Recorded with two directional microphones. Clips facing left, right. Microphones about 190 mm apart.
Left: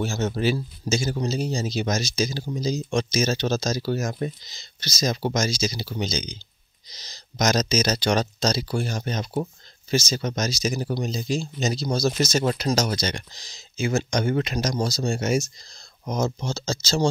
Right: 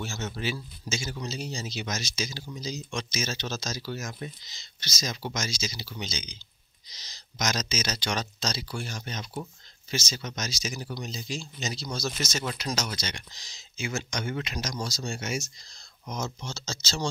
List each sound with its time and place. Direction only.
0.0 s speech: 40° left (ahead or behind)
3.1 s speech: 35° left (ahead or behind)